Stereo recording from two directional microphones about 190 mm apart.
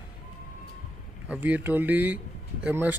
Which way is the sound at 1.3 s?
10° right (ahead or behind).